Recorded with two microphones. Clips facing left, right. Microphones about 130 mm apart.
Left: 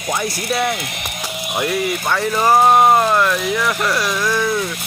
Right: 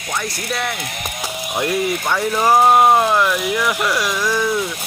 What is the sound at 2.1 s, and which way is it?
Speech, 5° right (ahead or behind).